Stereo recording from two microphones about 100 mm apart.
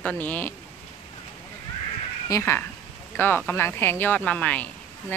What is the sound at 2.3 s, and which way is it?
Speech, 30° left (ahead or behind).